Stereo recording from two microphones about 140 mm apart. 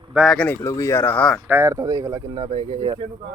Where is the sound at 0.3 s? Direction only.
15° left (ahead or behind).